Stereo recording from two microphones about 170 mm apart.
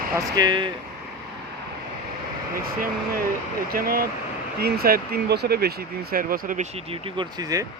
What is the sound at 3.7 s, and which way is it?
Speech, 60° right (ahead or behind).